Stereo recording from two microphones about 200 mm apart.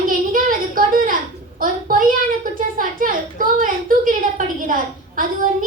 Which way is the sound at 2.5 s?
45° right (ahead or behind).